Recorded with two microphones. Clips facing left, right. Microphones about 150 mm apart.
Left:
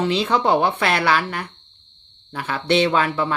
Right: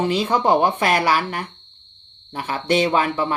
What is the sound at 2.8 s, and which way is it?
Speech, 10° right (ahead or behind).